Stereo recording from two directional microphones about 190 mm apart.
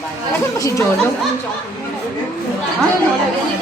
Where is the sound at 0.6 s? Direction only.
15° left (ahead or behind).